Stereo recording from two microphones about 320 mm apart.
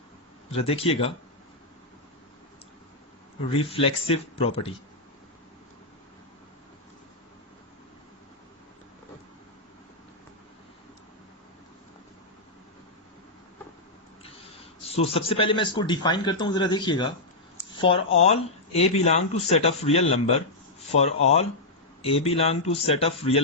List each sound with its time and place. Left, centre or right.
0.5 s speech: centre
3.5 s speech: centre
14.3 s a man's voice: centre